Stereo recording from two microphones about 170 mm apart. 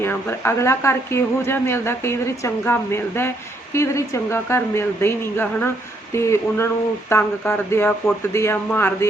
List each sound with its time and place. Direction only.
0.0 s a woman's voice: 15° left (ahead or behind)